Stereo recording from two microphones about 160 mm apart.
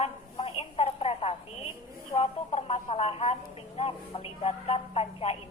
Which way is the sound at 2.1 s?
40° left (ahead or behind).